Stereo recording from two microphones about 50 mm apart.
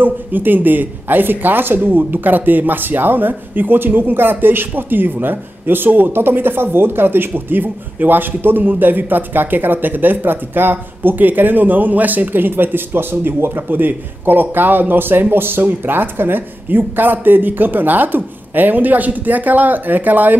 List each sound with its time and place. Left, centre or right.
0.0 s speech: right